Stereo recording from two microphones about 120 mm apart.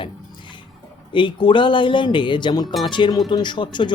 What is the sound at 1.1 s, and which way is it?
Speech, 40° left (ahead or behind).